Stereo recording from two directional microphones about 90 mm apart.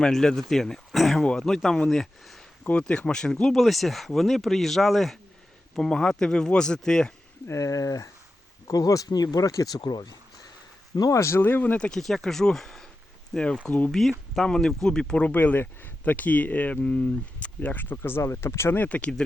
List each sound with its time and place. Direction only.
0.0 s speech: 5° left (ahead or behind)
7.4 s speech: 35° left (ahead or behind)
9.8 s speech: 50° left (ahead or behind)
10.9 s speech: 40° left (ahead or behind); by 13.9 s 15° left (ahead or behind)
13.9 s speech: centre (ahead or behind)